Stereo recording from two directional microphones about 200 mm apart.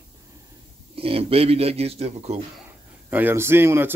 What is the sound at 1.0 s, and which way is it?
Speech, 30° right (ahead or behind).